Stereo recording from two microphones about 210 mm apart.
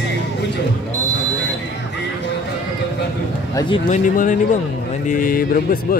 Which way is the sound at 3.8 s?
35° left (ahead or behind).